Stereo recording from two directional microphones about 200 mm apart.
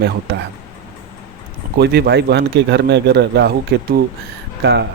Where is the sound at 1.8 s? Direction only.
55° right (ahead or behind).